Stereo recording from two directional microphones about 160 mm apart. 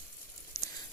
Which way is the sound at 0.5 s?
20° left (ahead or behind).